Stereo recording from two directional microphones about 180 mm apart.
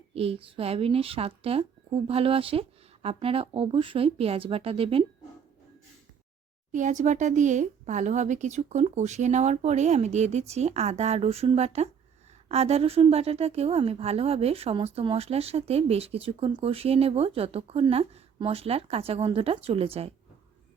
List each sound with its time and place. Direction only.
0.1 s a woman's voice: 35° right (ahead or behind)
6.7 s a woman's voice: 45° right (ahead or behind)